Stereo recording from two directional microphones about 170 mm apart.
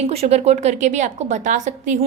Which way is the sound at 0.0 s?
35° right (ahead or behind).